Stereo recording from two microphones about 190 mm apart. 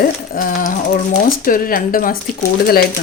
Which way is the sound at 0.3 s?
45° left (ahead or behind).